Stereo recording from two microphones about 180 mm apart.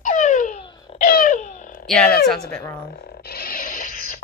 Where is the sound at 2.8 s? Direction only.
60° left (ahead or behind).